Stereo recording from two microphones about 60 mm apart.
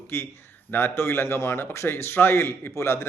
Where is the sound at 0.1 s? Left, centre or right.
Left.